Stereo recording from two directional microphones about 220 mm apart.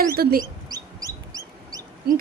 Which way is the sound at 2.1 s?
45° right (ahead or behind).